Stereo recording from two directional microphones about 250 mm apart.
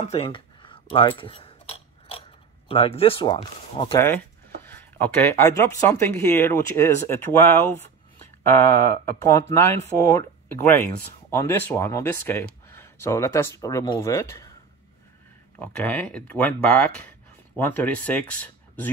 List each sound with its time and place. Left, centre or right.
0.0 s a sound: left
2.7 s speech: left
4.7 s speech: centre
15.6 s speech: centre